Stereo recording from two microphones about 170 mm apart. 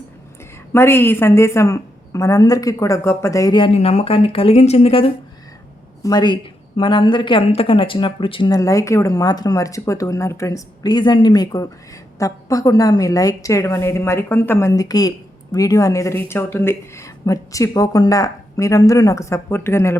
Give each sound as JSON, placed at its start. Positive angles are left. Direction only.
{"t": 0.7, "sound": "a woman's voice", "side_deg": 15}
{"t": 6.0, "sound": "a woman's voice", "side_deg": 25}